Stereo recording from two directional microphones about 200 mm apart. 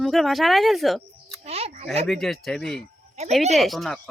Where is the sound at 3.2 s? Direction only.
35° right (ahead or behind).